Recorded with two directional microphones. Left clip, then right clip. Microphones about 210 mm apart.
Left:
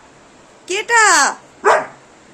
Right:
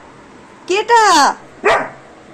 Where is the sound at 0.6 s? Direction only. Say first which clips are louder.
Right 2 dB; 10° left (ahead or behind).